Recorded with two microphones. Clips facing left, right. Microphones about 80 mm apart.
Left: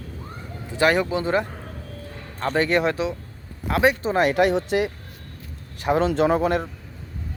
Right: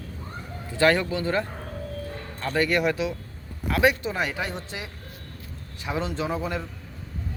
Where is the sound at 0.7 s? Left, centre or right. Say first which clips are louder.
Left 2 dB; centre.